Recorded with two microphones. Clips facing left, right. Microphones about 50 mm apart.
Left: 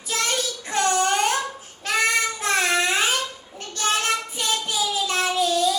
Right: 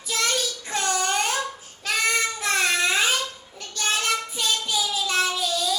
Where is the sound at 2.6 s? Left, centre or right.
Left.